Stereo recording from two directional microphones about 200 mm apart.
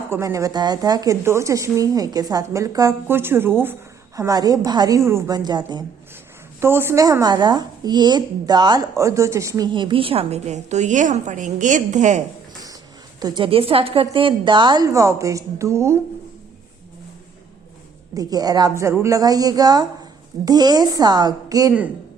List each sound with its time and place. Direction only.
0.1 s a woman's voice: 15° right (ahead or behind); by 12.2 s 35° right (ahead or behind)
13.1 s a woman's voice: 20° right (ahead or behind)
18.1 s a woman's voice: 20° right (ahead or behind)